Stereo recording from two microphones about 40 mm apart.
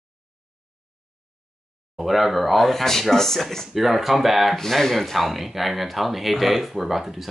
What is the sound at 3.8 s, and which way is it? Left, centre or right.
Speech, centre.